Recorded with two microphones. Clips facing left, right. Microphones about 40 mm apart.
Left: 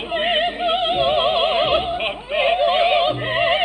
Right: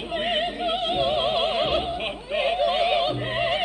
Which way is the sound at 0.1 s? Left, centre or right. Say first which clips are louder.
Left 6 dB; left.